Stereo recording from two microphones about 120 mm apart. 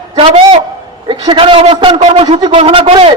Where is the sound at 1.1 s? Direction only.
45° right (ahead or behind).